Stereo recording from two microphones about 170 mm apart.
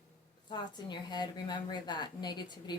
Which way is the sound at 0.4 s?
25° left (ahead or behind).